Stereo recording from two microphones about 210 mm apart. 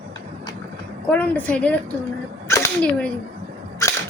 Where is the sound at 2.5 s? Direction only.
10° left (ahead or behind).